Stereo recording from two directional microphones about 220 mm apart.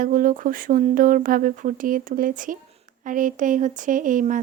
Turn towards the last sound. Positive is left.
turn(degrees=-35)  # may be behind; listen again after turning